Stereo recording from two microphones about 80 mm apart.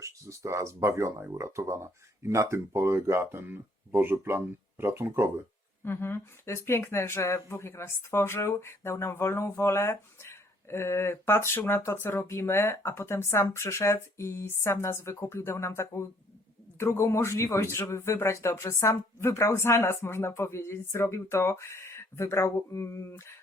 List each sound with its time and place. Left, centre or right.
0.0 s speech: right
5.8 s speech: left